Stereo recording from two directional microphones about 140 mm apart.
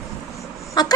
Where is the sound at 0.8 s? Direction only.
30° left (ahead or behind).